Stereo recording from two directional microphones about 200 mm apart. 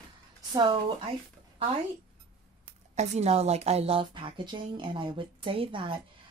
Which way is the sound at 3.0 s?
30° right (ahead or behind).